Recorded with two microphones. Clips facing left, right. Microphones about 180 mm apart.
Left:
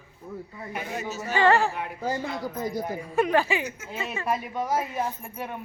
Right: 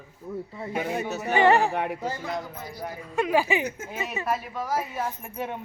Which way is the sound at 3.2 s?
15° right (ahead or behind).